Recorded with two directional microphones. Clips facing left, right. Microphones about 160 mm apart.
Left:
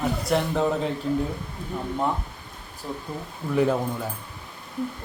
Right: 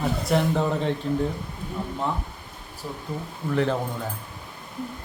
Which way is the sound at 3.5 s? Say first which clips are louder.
Left 2 dB; 10° left (ahead or behind).